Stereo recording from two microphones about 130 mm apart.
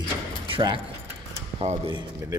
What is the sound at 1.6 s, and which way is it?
Speech, 55° right (ahead or behind).